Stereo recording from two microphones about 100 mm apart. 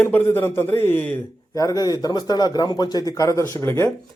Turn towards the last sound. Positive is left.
turn(degrees=25)  # may be behind; listen again after turning